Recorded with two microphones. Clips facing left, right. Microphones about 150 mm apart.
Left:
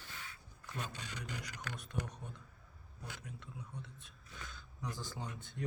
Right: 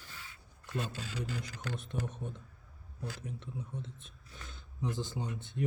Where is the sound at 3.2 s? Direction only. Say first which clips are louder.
Right 7 dB; 20° right (ahead or behind).